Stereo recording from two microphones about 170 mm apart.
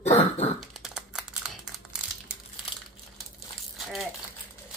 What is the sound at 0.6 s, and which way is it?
Crumpling, 5° right (ahead or behind).